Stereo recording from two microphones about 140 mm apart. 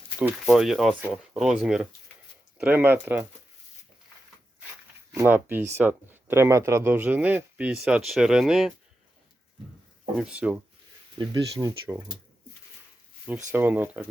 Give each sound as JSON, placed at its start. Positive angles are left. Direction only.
{"t": 0.2, "sound": "speech", "side_deg": -10}
{"t": 5.1, "sound": "speech", "side_deg": -15}
{"t": 10.2, "sound": "speech", "side_deg": -10}
{"t": 11.6, "sound": "speech", "side_deg": -20}
{"t": 13.5, "sound": "speech", "side_deg": -15}